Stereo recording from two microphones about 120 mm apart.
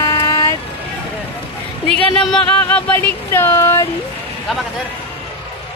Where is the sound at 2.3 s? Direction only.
10° left (ahead or behind); by 3.9 s 25° left (ahead or behind).